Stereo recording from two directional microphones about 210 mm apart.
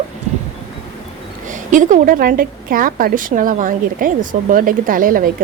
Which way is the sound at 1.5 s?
35° right (ahead or behind).